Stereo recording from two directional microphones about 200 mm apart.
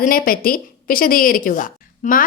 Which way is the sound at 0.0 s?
45° left (ahead or behind).